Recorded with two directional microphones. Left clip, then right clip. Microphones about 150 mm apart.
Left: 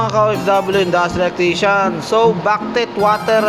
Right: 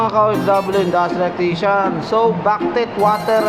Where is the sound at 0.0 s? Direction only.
20° left (ahead or behind).